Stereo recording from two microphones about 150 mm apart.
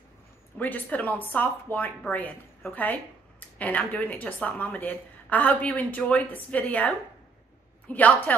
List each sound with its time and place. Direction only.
0.6 s a woman's voice: 10° left (ahead or behind)
7.9 s a woman's voice: 10° left (ahead or behind)